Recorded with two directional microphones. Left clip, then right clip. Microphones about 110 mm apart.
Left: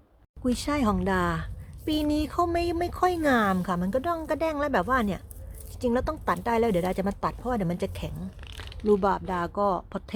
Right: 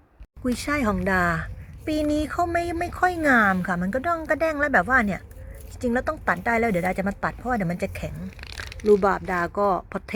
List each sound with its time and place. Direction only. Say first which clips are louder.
0.4 s speech: right 2 dB; 20° left (ahead or behind)
8.9 s speech: right 4 dB; centre (ahead or behind)